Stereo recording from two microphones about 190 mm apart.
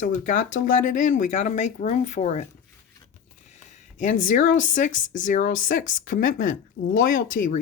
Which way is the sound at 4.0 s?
45° left (ahead or behind).